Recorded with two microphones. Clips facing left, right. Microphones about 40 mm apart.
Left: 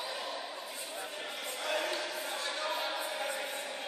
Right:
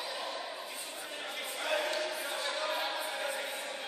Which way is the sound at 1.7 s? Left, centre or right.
Centre.